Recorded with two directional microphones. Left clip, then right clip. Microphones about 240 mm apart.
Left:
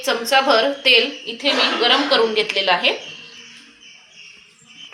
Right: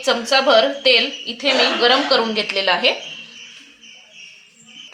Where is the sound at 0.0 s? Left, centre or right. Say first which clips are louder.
Right 1 dB; right.